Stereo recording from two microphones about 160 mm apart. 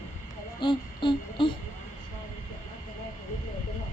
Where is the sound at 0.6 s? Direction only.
30° left (ahead or behind).